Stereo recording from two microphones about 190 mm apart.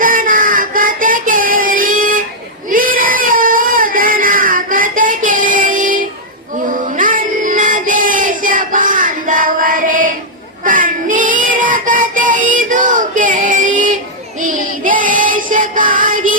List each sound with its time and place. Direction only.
0.0 s child singing: 45° right (ahead or behind)
2.6 s a sound: 45° right (ahead or behind)
6.7 s child singing: 45° right (ahead or behind)